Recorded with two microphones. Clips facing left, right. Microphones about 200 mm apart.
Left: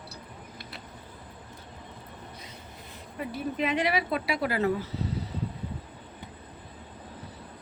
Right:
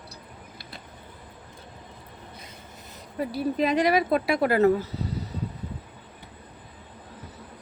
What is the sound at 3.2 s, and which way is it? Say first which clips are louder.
Speech: right 5 dB; 35° right (ahead or behind).